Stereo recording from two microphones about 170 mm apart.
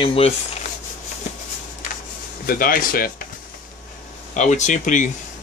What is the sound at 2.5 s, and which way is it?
Speech, 55° left (ahead or behind).